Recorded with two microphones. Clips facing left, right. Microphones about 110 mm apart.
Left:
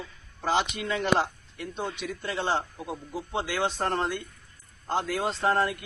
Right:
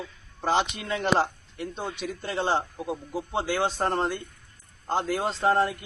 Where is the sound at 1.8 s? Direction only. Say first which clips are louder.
Left 3 dB; centre (ahead or behind).